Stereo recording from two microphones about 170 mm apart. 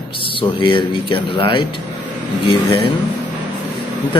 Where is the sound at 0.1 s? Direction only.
30° left (ahead or behind).